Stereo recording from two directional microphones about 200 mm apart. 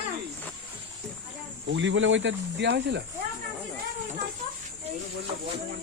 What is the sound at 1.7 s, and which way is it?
Speech, 70° right (ahead or behind).